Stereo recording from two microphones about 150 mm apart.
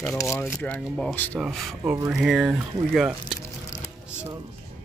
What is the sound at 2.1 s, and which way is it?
Speech, 5° right (ahead or behind).